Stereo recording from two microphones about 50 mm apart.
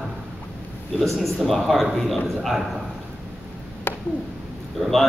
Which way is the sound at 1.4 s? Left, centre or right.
Centre.